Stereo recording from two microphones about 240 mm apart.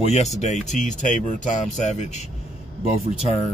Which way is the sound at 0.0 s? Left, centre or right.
Left.